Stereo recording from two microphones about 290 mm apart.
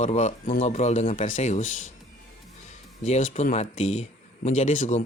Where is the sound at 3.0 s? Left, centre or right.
Left.